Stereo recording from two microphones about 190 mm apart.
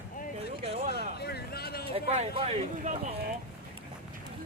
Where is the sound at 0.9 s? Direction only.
60° left (ahead or behind).